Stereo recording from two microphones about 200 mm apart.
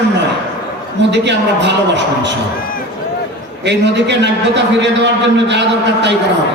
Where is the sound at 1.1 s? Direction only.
60° right (ahead or behind).